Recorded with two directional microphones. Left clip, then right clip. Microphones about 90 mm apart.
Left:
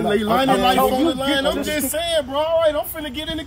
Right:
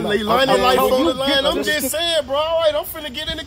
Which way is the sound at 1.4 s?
25° right (ahead or behind).